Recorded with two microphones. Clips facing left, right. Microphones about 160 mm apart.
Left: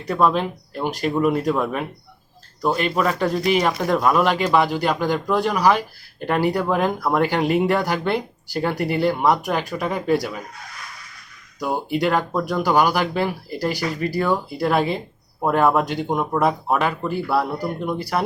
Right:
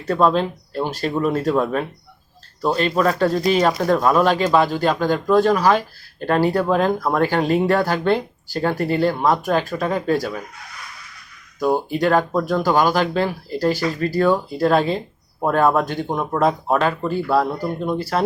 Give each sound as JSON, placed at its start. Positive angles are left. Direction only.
{"t": 0.3, "sound": "speech", "side_deg": 15}
{"t": 11.6, "sound": "speech", "side_deg": 15}